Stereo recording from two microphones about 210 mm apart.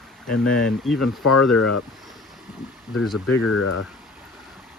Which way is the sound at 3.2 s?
90° left.